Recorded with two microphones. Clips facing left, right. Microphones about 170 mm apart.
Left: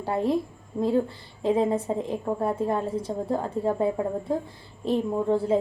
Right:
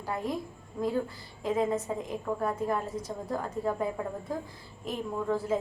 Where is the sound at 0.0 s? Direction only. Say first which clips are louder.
Left 8 dB; 30° left (ahead or behind).